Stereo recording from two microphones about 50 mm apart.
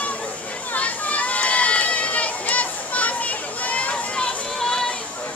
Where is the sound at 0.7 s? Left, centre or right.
Left.